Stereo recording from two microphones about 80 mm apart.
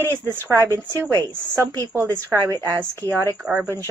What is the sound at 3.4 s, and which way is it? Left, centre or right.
Speech, centre.